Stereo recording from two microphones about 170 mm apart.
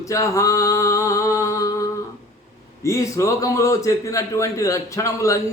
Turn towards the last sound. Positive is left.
turn(degrees=20)  # may be behind; listen again after turning